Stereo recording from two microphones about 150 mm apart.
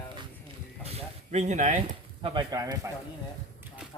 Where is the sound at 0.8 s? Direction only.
45° right (ahead or behind).